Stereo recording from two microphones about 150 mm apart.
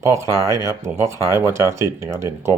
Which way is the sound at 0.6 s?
20° right (ahead or behind).